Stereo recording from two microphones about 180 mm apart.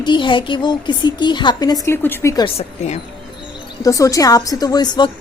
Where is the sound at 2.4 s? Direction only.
35° left (ahead or behind).